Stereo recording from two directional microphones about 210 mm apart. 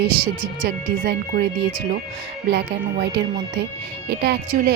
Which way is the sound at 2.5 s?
50° right (ahead or behind).